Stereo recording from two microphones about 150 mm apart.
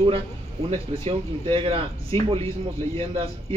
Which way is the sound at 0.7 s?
40° right (ahead or behind).